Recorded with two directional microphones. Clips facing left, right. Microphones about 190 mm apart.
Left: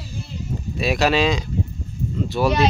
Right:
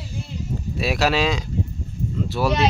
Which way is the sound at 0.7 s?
5° right (ahead or behind).